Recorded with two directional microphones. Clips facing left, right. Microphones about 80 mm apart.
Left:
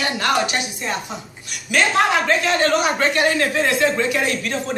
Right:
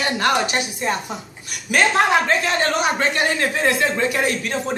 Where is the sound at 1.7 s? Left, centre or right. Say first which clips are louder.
Right 1 dB; right.